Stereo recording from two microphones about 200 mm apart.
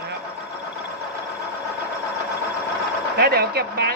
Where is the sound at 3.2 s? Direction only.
50° right (ahead or behind).